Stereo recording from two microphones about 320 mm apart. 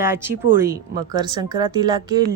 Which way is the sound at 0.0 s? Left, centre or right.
Centre.